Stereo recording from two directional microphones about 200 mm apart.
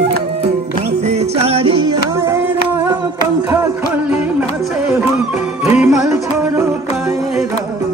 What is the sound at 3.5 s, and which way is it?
Music, 10° right (ahead or behind).